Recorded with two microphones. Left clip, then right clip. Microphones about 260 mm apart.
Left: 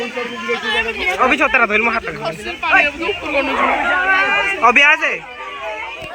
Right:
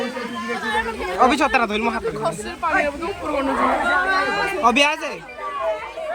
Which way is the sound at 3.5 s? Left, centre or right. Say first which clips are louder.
Left 2 dB; left.